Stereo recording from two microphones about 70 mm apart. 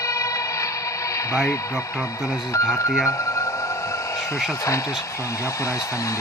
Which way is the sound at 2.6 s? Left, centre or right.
Left.